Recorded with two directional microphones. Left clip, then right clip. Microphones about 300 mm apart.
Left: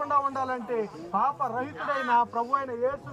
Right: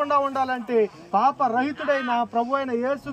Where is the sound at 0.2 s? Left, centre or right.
Right.